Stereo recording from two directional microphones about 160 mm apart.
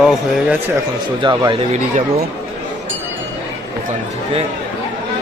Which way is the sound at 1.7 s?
45° right (ahead or behind).